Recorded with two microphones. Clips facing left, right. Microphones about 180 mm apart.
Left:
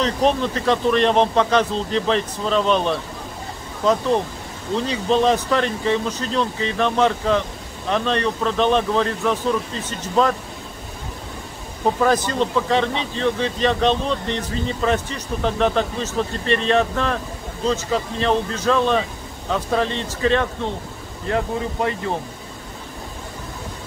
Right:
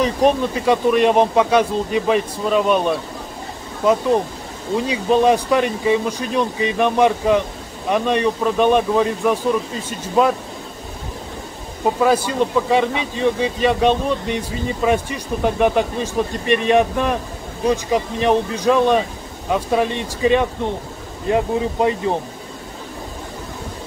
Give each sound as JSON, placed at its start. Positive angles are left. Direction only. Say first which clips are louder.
{"t": 0.0, "sound": "speech", "louder": "right 3 dB", "side_deg": -10}
{"t": 12.0, "sound": "speech", "louder": "right 3 dB", "side_deg": -10}